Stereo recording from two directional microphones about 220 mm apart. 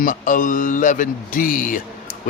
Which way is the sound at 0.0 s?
35° left (ahead or behind).